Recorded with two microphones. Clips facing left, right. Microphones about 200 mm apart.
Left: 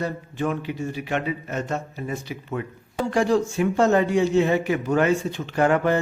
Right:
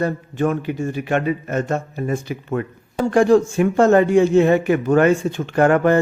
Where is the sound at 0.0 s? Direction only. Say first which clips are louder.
Right 6 dB; 50° right (ahead or behind).